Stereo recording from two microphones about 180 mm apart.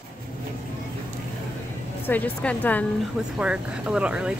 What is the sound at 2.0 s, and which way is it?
Speech, 10° left (ahead or behind).